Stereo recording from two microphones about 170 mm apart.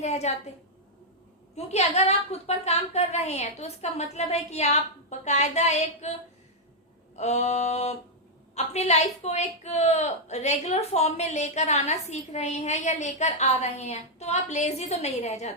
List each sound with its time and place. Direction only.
0.0 s a woman's voice: 40° left (ahead or behind)
1.5 s a woman's voice: 40° left (ahead or behind)
7.2 s a woman's voice: 40° left (ahead or behind)